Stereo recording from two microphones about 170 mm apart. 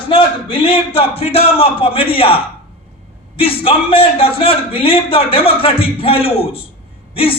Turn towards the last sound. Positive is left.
turn(degrees=35)  # may be behind; listen again after turning